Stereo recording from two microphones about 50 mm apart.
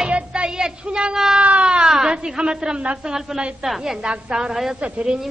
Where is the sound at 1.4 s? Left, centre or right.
Right.